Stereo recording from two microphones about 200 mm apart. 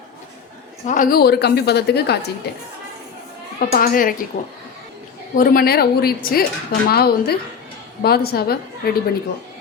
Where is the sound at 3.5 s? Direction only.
50° left (ahead or behind).